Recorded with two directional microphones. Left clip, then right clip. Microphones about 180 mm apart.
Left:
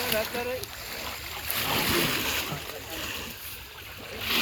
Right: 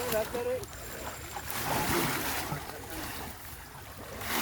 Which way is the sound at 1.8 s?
40° right (ahead or behind).